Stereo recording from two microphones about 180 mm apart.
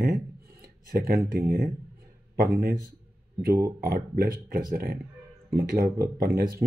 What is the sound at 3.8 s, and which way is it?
Speech, 55° right (ahead or behind).